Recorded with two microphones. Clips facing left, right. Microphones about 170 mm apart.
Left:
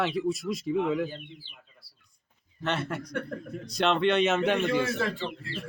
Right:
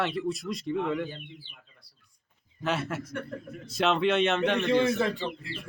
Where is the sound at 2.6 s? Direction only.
5° right (ahead or behind).